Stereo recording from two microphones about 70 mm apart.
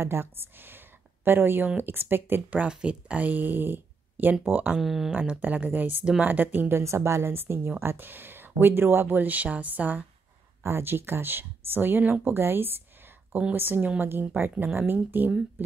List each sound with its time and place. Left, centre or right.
0.0 s speech: right
2.5 s speech: centre
4.7 s speech: centre
5.2 s speech: right
6.8 s speech: right